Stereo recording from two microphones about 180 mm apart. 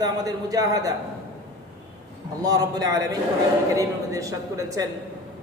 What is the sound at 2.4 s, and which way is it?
A man's voice, 20° right (ahead or behind).